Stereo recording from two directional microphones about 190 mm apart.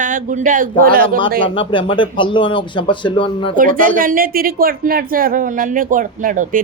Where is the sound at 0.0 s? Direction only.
45° right (ahead or behind).